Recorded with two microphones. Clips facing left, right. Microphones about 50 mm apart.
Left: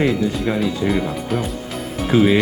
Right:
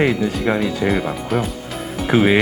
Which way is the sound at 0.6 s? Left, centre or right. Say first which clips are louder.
Even; centre.